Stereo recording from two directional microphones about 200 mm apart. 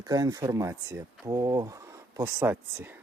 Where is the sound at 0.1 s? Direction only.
15° right (ahead or behind).